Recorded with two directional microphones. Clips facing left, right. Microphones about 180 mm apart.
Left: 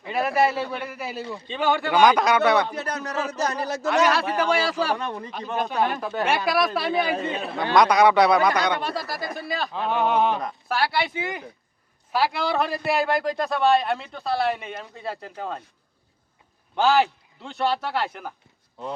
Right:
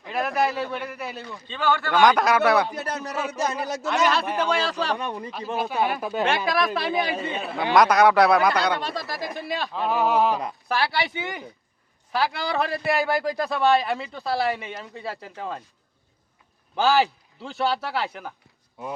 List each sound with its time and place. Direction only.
0.0 s speech: centre (ahead or behind)
1.5 s speech: 15° left (ahead or behind)
1.9 s speech: centre (ahead or behind)
2.6 s speech: 15° right (ahead or behind)
3.8 s speech: centre (ahead or behind)
4.9 s speech: 15° right (ahead or behind)
5.3 s speech: centre (ahead or behind)
6.2 s speech: centre (ahead or behind)
16.7 s speech: centre (ahead or behind)